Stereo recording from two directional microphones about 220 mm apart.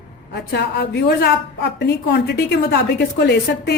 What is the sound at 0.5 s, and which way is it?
A woman's voice, 50° left (ahead or behind).